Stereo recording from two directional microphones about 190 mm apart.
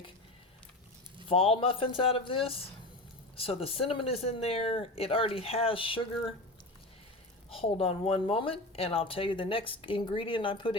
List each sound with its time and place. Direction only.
1.3 s speech: 30° left (ahead or behind)
7.5 s speech: 30° left (ahead or behind)